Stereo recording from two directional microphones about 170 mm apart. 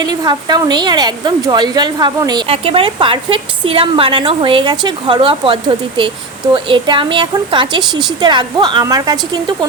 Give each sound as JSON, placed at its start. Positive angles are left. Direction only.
{"t": 0.0, "sound": "a woman's voice", "side_deg": -25}